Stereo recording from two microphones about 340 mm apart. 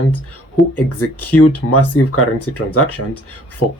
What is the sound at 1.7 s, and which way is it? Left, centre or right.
Speech, left.